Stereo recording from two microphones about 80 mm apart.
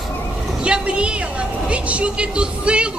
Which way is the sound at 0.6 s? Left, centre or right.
Centre.